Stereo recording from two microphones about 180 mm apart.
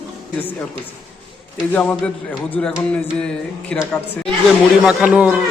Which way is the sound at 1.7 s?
5° left (ahead or behind).